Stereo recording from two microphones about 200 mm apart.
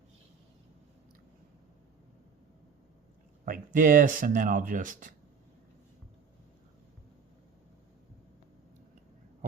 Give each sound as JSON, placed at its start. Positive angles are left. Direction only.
{"t": 3.4, "sound": "speech", "side_deg": -45}